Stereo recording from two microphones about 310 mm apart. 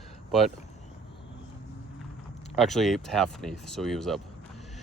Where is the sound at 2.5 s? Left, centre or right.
Centre.